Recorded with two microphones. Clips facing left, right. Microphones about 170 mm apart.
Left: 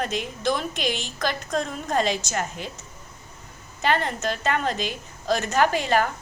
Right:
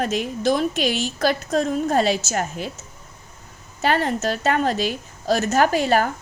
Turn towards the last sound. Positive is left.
turn(degrees=-40)  # may be behind; listen again after turning